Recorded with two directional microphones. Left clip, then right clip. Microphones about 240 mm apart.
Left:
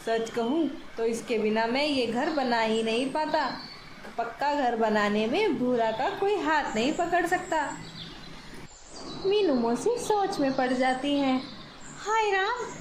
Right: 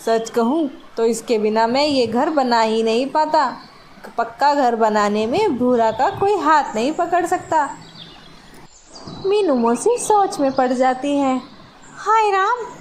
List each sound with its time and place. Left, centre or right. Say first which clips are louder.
0.0 s a woman's voice: right 10 dB; right
9.3 s a woman's voice: right 9 dB; right